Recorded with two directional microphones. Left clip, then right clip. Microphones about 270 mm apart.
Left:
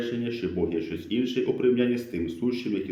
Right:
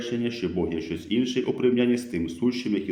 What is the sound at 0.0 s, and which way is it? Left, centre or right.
Speech, right.